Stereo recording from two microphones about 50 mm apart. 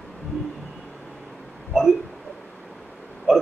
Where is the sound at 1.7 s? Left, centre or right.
Centre.